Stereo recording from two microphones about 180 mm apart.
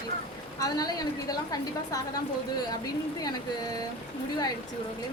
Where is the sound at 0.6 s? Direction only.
20° left (ahead or behind).